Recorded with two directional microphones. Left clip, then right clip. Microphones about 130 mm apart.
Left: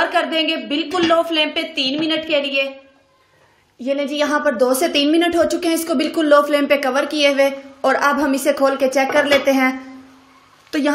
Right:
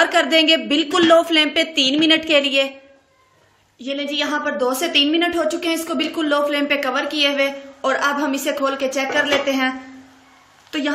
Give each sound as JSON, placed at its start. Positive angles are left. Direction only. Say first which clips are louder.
{"t": 0.0, "sound": "a woman's voice", "louder": "right 2 dB", "side_deg": -50}
{"t": 3.8, "sound": "a woman's voice", "louder": "left 3 dB", "side_deg": 50}
{"t": 10.7, "sound": "a woman's voice", "louder": "left 3 dB", "side_deg": 55}